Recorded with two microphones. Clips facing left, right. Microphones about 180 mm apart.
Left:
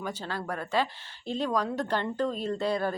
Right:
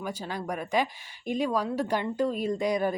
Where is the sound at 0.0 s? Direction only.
10° right (ahead or behind).